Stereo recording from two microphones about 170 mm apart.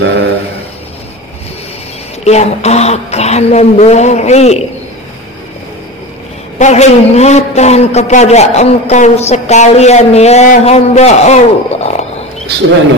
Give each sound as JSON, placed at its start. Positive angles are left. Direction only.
{"t": 0.0, "sound": "a sound", "side_deg": -85}
{"t": 2.2, "sound": "a man's voice", "side_deg": 40}
{"t": 6.6, "sound": "a man's voice", "side_deg": 40}